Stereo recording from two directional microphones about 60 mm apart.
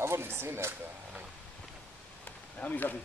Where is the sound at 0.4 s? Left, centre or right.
Right.